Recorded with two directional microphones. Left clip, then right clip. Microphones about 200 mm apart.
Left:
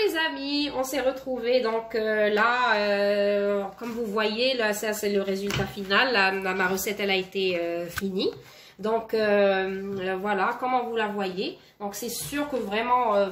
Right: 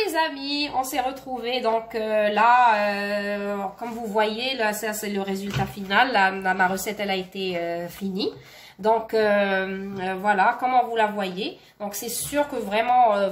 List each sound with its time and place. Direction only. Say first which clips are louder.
0.0 s speech: right 1 dB; 45° right (ahead or behind)
12.6 s speech: right 5 dB; 45° right (ahead or behind)